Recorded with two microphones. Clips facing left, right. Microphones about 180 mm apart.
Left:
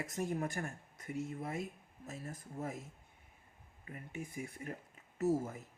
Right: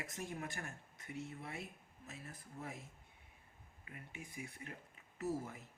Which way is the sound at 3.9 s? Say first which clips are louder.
Left 8 dB; 40° left (ahead or behind).